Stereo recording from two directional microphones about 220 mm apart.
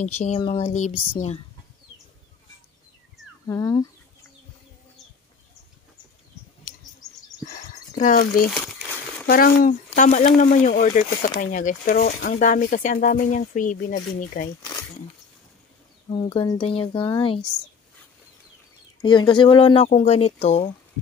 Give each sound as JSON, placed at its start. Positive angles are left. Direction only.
{"t": 0.0, "sound": "speech", "side_deg": 30}
{"t": 3.4, "sound": "speech", "side_deg": 15}
{"t": 7.4, "sound": "a sound", "side_deg": 35}
{"t": 8.5, "sound": "speech", "side_deg": 0}
{"t": 9.3, "sound": "speech", "side_deg": 40}
{"t": 16.1, "sound": "speech", "side_deg": 20}
{"t": 18.9, "sound": "speech", "side_deg": 20}